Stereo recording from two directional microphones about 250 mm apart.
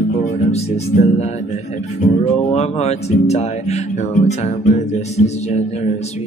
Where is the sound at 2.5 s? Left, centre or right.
Left.